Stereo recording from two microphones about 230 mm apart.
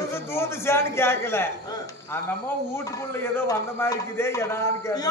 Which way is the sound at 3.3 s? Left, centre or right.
Centre.